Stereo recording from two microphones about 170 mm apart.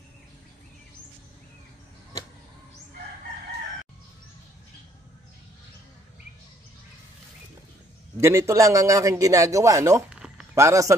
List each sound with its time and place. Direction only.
8.2 s speech: 15° right (ahead or behind)
10.1 s a sound: 5° right (ahead or behind)
10.5 s speech: 15° right (ahead or behind)